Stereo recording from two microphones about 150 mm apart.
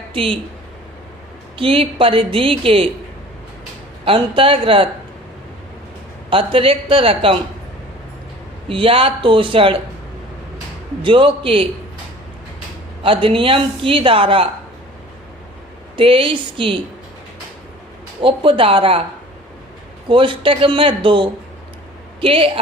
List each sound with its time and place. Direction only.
0.1 s speech: 35° right (ahead or behind)
1.5 s speech: 35° right (ahead or behind)
4.0 s speech: 35° right (ahead or behind)
6.3 s speech: 35° right (ahead or behind)
8.7 s speech: 35° right (ahead or behind)
11.0 s speech: 35° right (ahead or behind)
13.0 s speech: 35° right (ahead or behind)
16.0 s speech: 35° right (ahead or behind)
18.2 s speech: 35° right (ahead or behind)
20.1 s speech: 35° right (ahead or behind)